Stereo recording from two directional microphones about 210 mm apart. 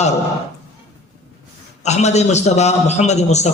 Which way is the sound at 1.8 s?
30° left (ahead or behind).